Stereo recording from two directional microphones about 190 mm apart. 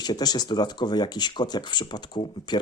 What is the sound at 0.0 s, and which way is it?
Speech, 20° left (ahead or behind).